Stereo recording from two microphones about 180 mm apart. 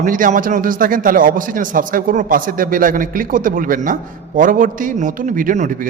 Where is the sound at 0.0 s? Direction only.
45° right (ahead or behind).